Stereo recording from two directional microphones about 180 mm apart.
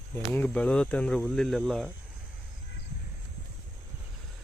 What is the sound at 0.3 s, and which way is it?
Speech, 5° left (ahead or behind).